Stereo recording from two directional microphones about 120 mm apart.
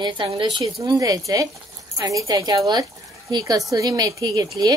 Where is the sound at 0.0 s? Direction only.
40° right (ahead or behind).